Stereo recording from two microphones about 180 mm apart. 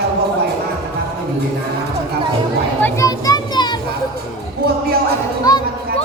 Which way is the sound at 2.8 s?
20° left (ahead or behind).